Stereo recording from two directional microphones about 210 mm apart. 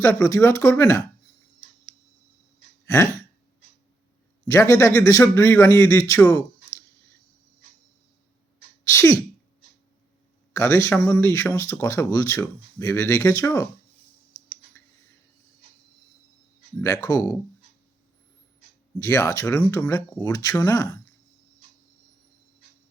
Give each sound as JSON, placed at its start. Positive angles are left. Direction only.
{"t": 0.0, "sound": "speech", "side_deg": 10}
{"t": 2.8, "sound": "a sound", "side_deg": 10}
{"t": 4.4, "sound": "speech", "side_deg": 15}
{"t": 8.9, "sound": "speech", "side_deg": 15}
{"t": 10.5, "sound": "speech", "side_deg": 15}
{"t": 16.8, "sound": "speech", "side_deg": 15}
{"t": 18.9, "sound": "speech", "side_deg": 15}